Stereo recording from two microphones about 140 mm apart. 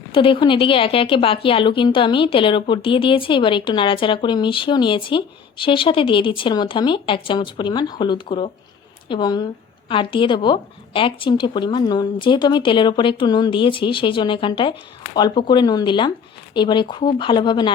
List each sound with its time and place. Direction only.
0.1 s a woman's voice: 40° left (ahead or behind)